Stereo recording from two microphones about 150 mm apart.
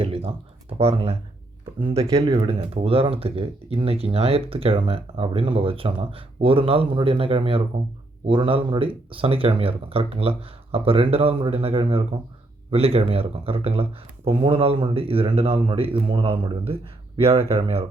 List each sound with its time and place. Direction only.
0.0 s computer keyboard: 40° right (ahead or behind)
0.7 s speech: 40° right (ahead or behind)